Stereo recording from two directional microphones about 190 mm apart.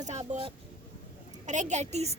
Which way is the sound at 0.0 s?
40° right (ahead or behind).